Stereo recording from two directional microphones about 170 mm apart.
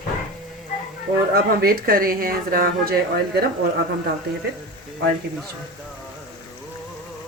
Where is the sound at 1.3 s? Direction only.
60° right (ahead or behind).